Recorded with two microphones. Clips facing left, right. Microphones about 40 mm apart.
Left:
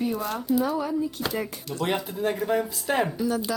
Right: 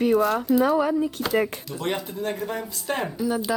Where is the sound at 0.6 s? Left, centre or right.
Right.